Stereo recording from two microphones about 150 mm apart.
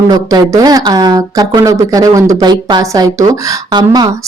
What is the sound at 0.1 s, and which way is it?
Speech, 25° right (ahead or behind).